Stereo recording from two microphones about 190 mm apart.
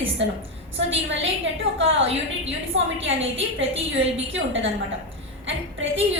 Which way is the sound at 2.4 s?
85° right.